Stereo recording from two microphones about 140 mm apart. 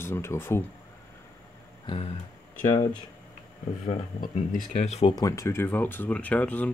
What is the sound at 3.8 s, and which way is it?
Speech, 60° left (ahead or behind).